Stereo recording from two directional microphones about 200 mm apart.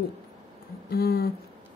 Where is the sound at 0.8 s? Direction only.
50° left (ahead or behind).